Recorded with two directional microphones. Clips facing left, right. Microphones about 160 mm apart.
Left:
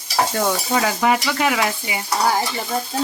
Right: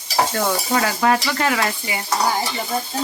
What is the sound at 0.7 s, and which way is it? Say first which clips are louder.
Speech: right 1 dB; 10° left (ahead or behind).